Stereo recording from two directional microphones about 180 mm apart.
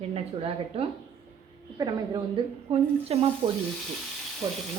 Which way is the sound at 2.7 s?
35° right (ahead or behind).